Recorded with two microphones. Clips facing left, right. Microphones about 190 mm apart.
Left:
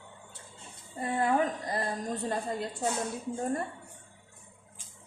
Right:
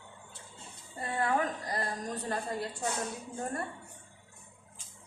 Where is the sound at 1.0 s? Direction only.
20° left (ahead or behind).